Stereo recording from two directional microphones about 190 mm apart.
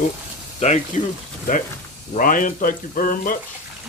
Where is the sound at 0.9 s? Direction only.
35° left (ahead or behind).